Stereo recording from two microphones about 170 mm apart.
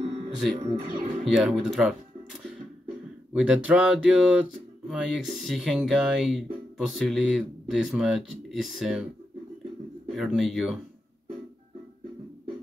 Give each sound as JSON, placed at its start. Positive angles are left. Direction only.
{"t": 0.6, "sound": "speech", "side_deg": -30}
{"t": 1.2, "sound": "speech", "side_deg": 0}
{"t": 3.3, "sound": "speech", "side_deg": -5}
{"t": 10.1, "sound": "speech", "side_deg": 0}